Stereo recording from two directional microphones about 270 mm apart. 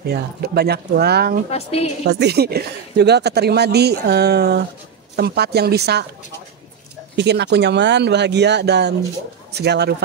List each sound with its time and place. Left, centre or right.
0.1 s speech: right
1.5 s a woman's voice: left
2.0 s speech: right
7.2 s speech: right